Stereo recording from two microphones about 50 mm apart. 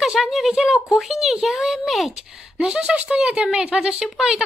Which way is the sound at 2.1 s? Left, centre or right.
Centre.